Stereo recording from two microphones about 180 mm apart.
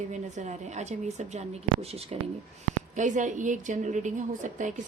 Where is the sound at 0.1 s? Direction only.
40° right (ahead or behind).